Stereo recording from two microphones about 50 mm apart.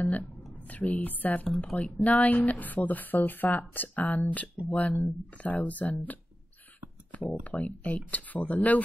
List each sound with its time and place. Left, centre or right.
0.7 s speech: left
2.0 s speech: left
7.1 s a sound: left
7.4 s speech: left